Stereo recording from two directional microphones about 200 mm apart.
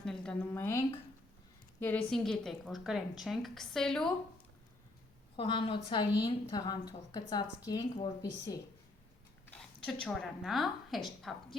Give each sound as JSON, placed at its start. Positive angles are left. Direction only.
{"t": 0.0, "sound": "a woman's voice", "side_deg": 5}
{"t": 5.4, "sound": "a woman's voice", "side_deg": 25}
{"t": 9.5, "sound": "a woman's voice", "side_deg": 5}